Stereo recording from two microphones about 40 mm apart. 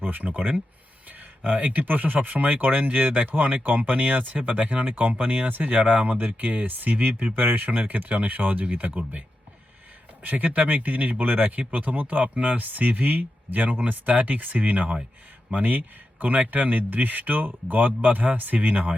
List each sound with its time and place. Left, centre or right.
0.0 s speech: right
10.2 s speech: right